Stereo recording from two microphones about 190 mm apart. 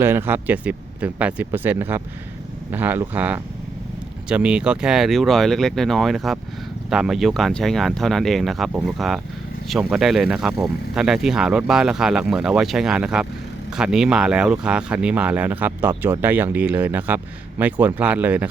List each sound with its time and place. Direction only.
0.0 s speech: 10° right (ahead or behind)